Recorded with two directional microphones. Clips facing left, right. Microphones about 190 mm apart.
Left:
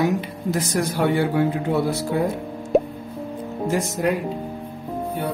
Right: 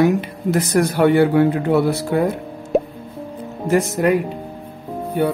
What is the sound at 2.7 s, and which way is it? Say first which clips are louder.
Music: even; centre (ahead or behind).